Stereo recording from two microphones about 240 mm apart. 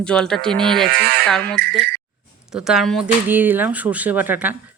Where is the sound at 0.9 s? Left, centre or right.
Right.